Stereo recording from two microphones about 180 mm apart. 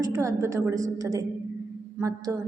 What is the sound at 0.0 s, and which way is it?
A woman's voice, 15° right (ahead or behind).